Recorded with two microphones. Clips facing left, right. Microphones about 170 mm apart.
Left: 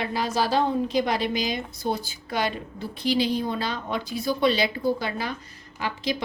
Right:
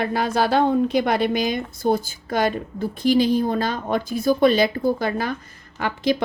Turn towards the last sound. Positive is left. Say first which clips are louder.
# right 6 dB
turn(degrees=-55)  # may be behind; listen again after turning